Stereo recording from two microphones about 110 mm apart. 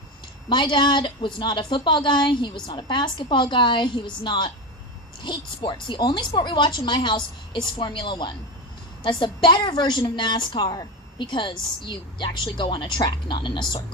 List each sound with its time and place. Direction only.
0.4 s a woman's voice: 45° left (ahead or behind)